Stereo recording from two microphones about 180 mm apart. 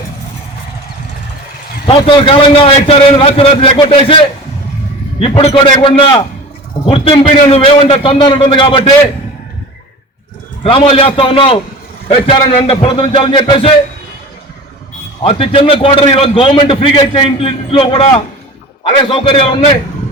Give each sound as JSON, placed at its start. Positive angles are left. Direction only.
{"t": 1.9, "sound": "a man's voice", "side_deg": 30}
{"t": 5.2, "sound": "a man's voice", "side_deg": 35}
{"t": 10.6, "sound": "a man's voice", "side_deg": 30}
{"t": 15.2, "sound": "a man's voice", "side_deg": 30}